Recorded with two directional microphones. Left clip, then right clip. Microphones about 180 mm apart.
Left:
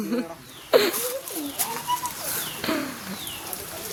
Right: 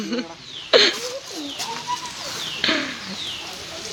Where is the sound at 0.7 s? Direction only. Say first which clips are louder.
Right 4 dB; 5° left (ahead or behind).